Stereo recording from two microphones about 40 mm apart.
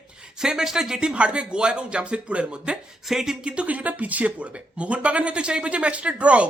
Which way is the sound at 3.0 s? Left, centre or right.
Centre.